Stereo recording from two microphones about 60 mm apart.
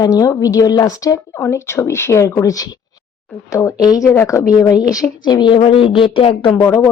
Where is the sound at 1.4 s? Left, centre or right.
Left.